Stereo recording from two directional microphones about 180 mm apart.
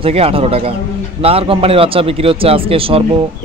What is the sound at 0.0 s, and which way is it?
A man's voice, 30° right (ahead or behind).